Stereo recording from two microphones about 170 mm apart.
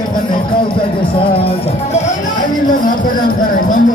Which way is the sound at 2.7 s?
50° left (ahead or behind).